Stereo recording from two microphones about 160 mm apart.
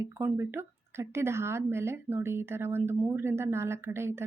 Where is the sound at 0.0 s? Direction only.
15° right (ahead or behind).